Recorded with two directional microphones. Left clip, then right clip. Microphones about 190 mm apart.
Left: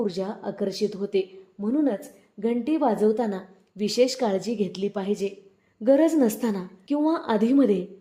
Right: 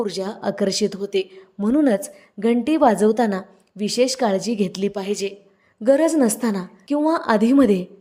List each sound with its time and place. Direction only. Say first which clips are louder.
0.0 s a woman's voice: right 4 dB; 20° right (ahead or behind)